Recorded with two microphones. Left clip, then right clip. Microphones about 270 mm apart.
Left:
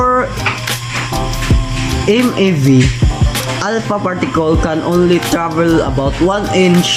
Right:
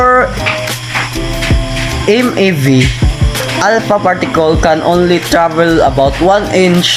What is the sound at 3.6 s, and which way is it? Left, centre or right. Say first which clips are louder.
Speech: right 8 dB; right.